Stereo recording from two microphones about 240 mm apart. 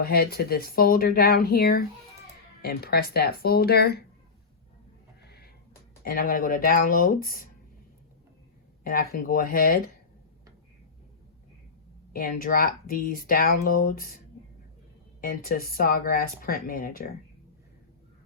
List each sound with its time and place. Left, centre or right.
0.0 s speech: left
6.1 s speech: left
8.8 s speech: left
12.1 s speech: left
15.2 s speech: left